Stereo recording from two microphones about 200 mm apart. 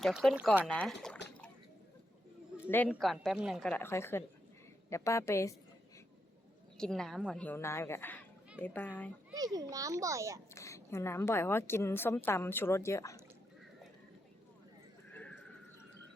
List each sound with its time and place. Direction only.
0.0 s a woman's voice: centre (ahead or behind)
0.7 s a woman's voice: 5° left (ahead or behind)
2.6 s a woman's voice: 10° left (ahead or behind)
6.7 s a woman's voice: 5° left (ahead or behind)
9.3 s a child's voice: 20° right (ahead or behind)
10.5 s a woman's voice: 15° left (ahead or behind)
15.1 s horse: 5° left (ahead or behind)